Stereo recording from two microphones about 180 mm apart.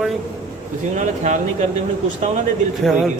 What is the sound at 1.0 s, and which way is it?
Speech, 45° right (ahead or behind).